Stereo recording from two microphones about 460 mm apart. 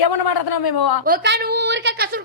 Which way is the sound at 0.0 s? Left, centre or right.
Left.